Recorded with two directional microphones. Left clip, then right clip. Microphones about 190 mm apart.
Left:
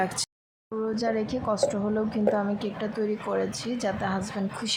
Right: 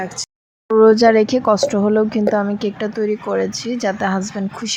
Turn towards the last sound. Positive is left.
turn(degrees=-20)  # may be behind; listen again after turning